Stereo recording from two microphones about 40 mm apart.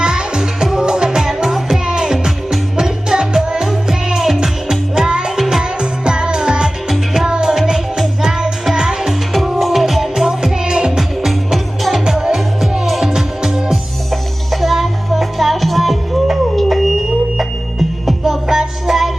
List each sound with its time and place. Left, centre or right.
0.0 s music: centre
2.1 s music: centre
2.7 s music: centre
6.8 s music: centre
7.3 s music: centre
9.3 s music: centre
10.2 s music: centre
11.2 s music: centre
12.0 s music: centre
14.1 s music: centre
16.3 s a sound: centre
18.0 s music: centre